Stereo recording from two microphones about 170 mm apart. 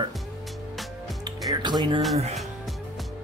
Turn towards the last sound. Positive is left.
turn(degrees=0)  # may be behind; listen again after turning